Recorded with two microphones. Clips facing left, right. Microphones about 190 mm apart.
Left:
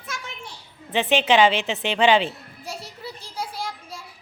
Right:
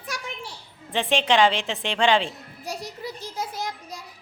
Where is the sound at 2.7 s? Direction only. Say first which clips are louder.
Right 3 dB; 15° right (ahead or behind).